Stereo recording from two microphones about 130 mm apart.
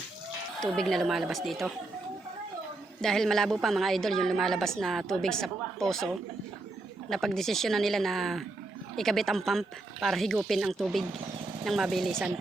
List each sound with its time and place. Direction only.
0.6 s a woman's voice: 5° left (ahead or behind)
3.0 s a woman's voice: 5° left (ahead or behind)
7.1 s a woman's voice: centre (ahead or behind)